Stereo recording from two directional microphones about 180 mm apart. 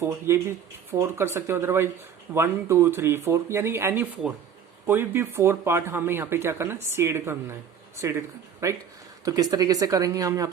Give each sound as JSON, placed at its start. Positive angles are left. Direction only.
{"t": 0.0, "sound": "speech", "side_deg": -15}
{"t": 8.6, "sound": "speech", "side_deg": -15}